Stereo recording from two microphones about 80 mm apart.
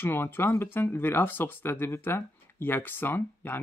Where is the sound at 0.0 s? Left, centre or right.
Left.